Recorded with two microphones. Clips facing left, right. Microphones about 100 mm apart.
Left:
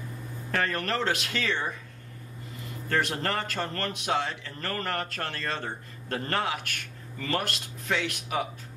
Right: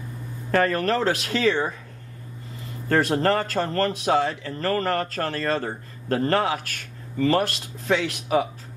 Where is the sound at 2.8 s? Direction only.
35° right (ahead or behind).